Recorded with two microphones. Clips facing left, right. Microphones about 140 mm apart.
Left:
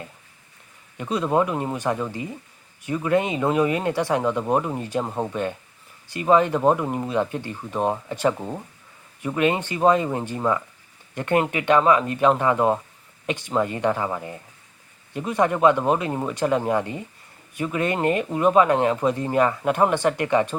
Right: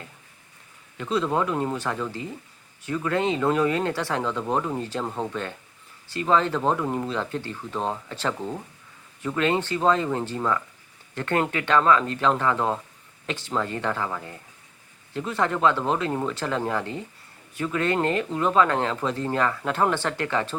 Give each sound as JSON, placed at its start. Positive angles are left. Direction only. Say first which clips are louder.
{"t": 0.9, "sound": "speech", "louder": "left 3 dB", "side_deg": 15}